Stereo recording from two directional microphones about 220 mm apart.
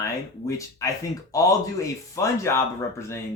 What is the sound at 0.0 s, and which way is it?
Speech, 15° left (ahead or behind).